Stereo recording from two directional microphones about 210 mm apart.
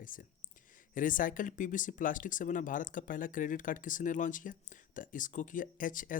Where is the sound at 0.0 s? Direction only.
40° left (ahead or behind).